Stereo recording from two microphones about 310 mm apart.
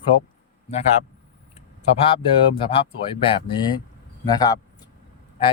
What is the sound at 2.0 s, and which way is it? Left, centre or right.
Speech, centre.